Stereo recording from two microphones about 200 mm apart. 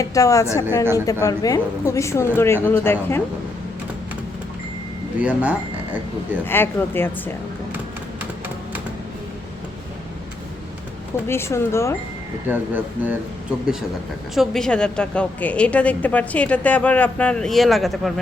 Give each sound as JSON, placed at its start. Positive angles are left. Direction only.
{"t": 0.0, "sound": "a woman's voice", "side_deg": 15}
{"t": 5.2, "sound": "speech", "side_deg": -5}
{"t": 6.4, "sound": "a woman's voice", "side_deg": 10}
{"t": 11.3, "sound": "a woman's voice", "side_deg": 15}
{"t": 12.5, "sound": "speech", "side_deg": -10}
{"t": 14.3, "sound": "a woman's voice", "side_deg": 5}